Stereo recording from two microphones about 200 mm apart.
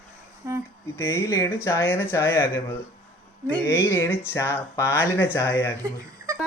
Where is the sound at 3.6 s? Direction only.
15° left (ahead or behind).